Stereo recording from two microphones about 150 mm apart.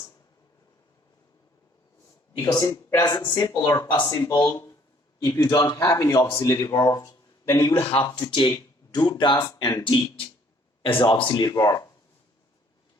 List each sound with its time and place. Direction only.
2.4 s speech: 25° left (ahead or behind)
7.9 s speech: 35° left (ahead or behind)